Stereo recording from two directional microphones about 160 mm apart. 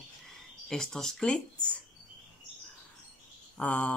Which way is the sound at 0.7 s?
5° left (ahead or behind).